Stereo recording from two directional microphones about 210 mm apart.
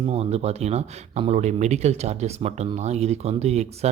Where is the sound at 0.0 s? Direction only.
30° right (ahead or behind).